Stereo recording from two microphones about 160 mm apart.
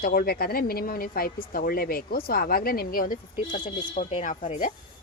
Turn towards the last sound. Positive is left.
turn(degrees=50)  # may be behind; listen again after turning